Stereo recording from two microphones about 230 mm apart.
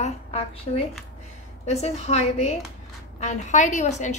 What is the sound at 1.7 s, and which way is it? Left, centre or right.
A woman's voice, left.